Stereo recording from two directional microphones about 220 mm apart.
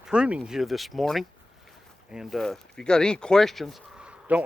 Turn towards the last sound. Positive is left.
turn(degrees=-5)  # may be behind; listen again after turning